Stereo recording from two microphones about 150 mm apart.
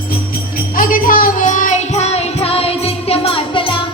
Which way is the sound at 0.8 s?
65° left (ahead or behind).